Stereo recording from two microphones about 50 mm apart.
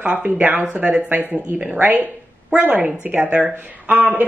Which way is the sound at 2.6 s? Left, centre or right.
Right.